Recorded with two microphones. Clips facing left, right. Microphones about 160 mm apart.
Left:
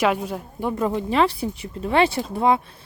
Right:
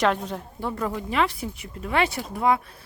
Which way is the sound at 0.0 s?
10° left (ahead or behind).